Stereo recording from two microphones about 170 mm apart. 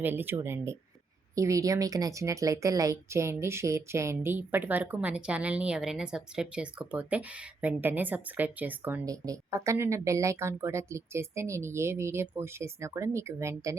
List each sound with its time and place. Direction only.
0.0 s a woman's voice: 10° right (ahead or behind)